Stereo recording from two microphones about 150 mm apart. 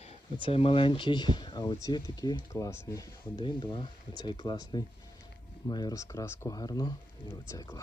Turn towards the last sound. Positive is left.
turn(degrees=20)  # may be behind; listen again after turning